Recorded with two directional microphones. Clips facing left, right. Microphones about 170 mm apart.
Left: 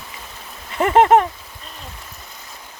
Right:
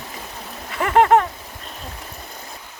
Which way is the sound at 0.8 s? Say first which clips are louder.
Left 2 dB; 20° left (ahead or behind).